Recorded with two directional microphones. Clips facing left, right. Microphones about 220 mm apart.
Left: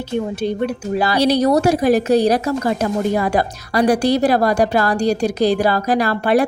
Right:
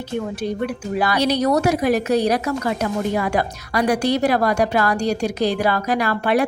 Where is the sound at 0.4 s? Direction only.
30° left (ahead or behind).